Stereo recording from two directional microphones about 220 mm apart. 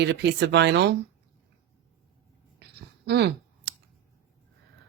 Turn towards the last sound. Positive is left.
turn(degrees=-50)  # may be behind; listen again after turning